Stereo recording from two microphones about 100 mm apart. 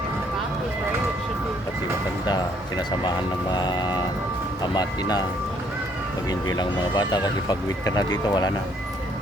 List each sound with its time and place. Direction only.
2.2 s speech: 50° left (ahead or behind)
6.2 s speech: 45° left (ahead or behind)